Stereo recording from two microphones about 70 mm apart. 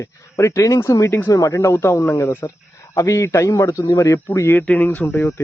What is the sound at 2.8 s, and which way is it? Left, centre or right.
Speech, left.